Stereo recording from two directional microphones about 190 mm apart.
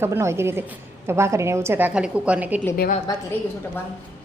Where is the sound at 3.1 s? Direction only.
20° left (ahead or behind).